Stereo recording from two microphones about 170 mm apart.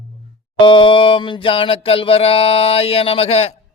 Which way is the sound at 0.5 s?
30° left (ahead or behind).